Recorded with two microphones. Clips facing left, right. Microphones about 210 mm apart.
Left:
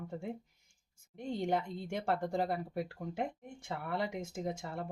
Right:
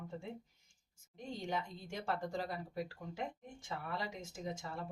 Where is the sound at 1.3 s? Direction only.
60° left (ahead or behind).